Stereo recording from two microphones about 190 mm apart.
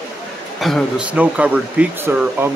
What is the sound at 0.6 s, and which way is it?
Speech, centre (ahead or behind).